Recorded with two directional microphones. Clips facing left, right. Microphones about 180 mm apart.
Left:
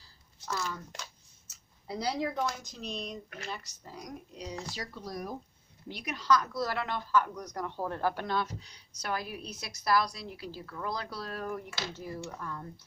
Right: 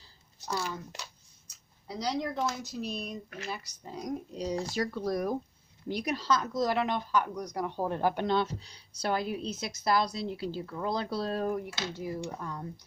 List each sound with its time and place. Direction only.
0.5 s speech: 30° right (ahead or behind)
2.0 s speech: 5° left (ahead or behind)
2.4 s speech: 5° right (ahead or behind)
3.9 s speech: 30° right (ahead or behind)
4.7 s speech: 55° right (ahead or behind)
5.9 s a woman's voice: 40° right (ahead or behind)
11.7 s speech: 15° right (ahead or behind)